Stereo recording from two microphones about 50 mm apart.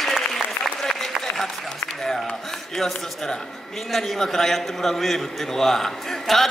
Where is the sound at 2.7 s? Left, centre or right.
Centre.